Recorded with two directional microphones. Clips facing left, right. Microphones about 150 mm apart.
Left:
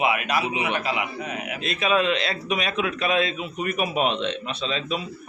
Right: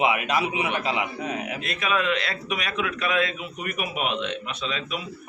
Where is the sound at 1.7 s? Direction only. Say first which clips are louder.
Left 4 dB; 25° left (ahead or behind).